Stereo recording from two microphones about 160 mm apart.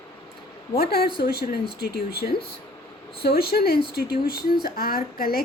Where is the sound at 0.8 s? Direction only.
70° left (ahead or behind).